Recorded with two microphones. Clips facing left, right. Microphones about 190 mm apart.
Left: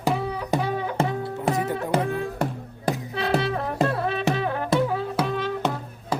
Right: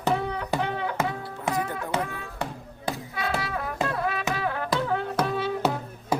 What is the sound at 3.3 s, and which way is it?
Music, 30° left (ahead or behind).